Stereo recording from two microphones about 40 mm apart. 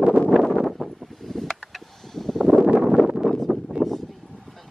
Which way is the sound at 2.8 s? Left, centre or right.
Centre.